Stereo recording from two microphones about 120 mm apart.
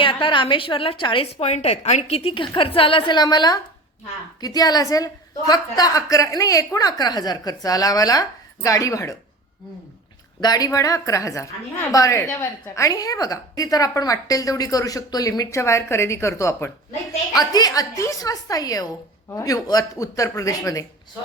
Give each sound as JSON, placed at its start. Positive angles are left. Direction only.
{"t": 0.0, "sound": "a woman's voice", "side_deg": 45}
{"t": 10.4, "sound": "a woman's voice", "side_deg": 30}
{"t": 17.3, "sound": "a woman's voice", "side_deg": 30}